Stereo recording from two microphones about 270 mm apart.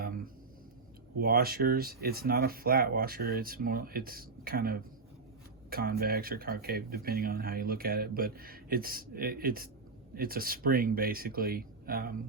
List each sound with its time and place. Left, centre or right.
1.1 s speech: right